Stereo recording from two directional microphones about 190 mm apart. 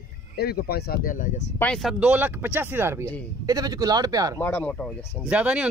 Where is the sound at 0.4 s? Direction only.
55° left (ahead or behind).